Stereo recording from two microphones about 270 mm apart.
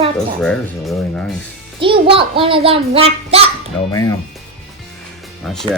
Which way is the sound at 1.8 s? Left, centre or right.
Centre.